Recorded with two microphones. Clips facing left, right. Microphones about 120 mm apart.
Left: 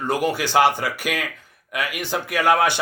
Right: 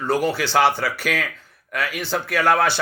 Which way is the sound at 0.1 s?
15° left (ahead or behind).